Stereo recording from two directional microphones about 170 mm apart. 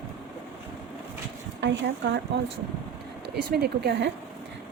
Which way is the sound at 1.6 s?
90° right.